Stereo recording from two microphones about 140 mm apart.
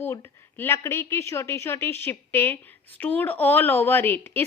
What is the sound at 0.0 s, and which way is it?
A woman's voice, 15° left (ahead or behind).